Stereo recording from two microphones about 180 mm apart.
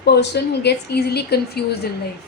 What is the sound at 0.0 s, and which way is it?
A woman's voice, 65° left (ahead or behind).